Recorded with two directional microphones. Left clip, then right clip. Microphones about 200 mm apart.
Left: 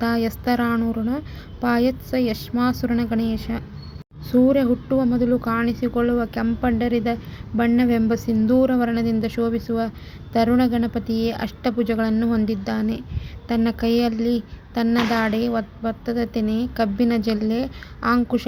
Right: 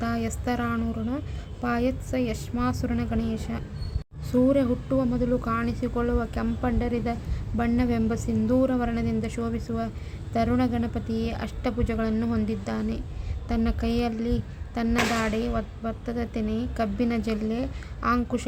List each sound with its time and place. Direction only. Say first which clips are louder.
0.0 s speech: left 7 dB; 25° left (ahead or behind)